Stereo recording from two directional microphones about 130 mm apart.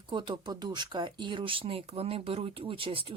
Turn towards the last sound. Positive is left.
turn(degrees=-45)  # may be behind; listen again after turning